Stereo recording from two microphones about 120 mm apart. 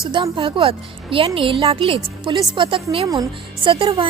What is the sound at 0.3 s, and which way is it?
A woman's voice, 50° right (ahead or behind).